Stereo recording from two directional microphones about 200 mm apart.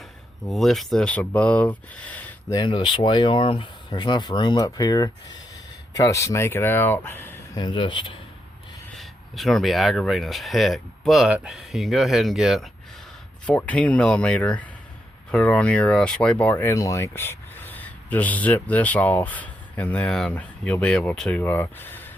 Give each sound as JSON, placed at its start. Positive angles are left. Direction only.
{"t": 0.4, "sound": "speech", "side_deg": 0}
{"t": 2.6, "sound": "speech", "side_deg": 25}
{"t": 7.6, "sound": "speech", "side_deg": 25}
{"t": 9.0, "sound": "speech", "side_deg": 0}